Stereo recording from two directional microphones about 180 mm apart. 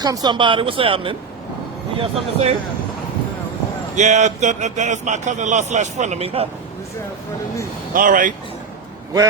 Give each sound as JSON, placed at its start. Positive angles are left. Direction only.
{"t": 0.0, "sound": "a man's voice", "side_deg": -20}
{"t": 3.9, "sound": "a man's voice", "side_deg": -40}
{"t": 7.9, "sound": "speech", "side_deg": -50}